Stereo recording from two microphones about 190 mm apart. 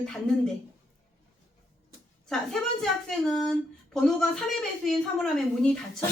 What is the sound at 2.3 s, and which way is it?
Speech, 5° left (ahead or behind).